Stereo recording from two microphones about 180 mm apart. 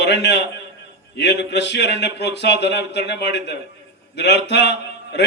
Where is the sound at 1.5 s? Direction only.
70° left (ahead or behind).